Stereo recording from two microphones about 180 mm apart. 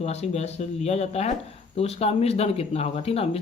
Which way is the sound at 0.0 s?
35° left (ahead or behind).